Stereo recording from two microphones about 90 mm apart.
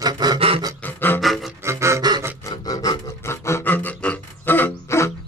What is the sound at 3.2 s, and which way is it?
Music, 30° left (ahead or behind).